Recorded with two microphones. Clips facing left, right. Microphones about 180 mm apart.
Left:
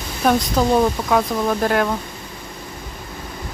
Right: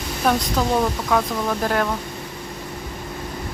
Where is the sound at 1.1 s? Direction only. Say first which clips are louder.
Left 1 dB; 5° left (ahead or behind).